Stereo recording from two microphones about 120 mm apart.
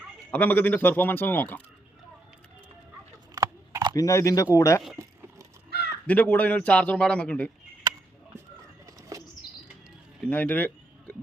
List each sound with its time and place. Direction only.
0.3 s a man's voice: 15° left (ahead or behind)
3.3 s a sound: 30° right (ahead or behind)
3.9 s speech: 25° left (ahead or behind)
4.9 s a sound: 25° right (ahead or behind)
6.1 s a man's voice: 10° left (ahead or behind)
9.1 s bird flight: 30° right (ahead or behind)
10.2 s speech: 15° left (ahead or behind)